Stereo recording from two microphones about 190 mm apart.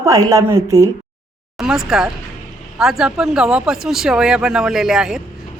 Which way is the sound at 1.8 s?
Centre (ahead or behind).